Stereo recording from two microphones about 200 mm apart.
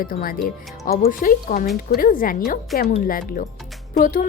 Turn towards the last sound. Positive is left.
turn(degrees=45)  # may be behind; listen again after turning